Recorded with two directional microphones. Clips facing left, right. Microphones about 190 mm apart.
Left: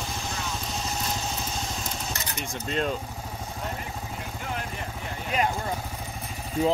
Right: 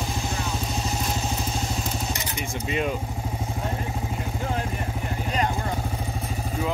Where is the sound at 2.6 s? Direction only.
10° right (ahead or behind).